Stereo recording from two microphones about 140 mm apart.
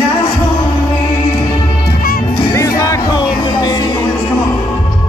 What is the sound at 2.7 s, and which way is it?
Music, 25° left (ahead or behind).